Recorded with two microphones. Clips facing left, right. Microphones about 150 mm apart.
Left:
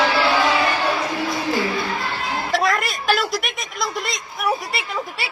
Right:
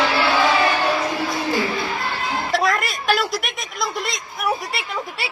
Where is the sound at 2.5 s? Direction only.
Centre (ahead or behind).